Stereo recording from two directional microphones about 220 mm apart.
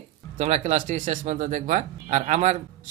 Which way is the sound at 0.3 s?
30° right (ahead or behind).